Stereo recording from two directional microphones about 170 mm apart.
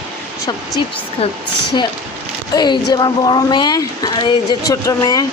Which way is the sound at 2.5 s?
25° left (ahead or behind).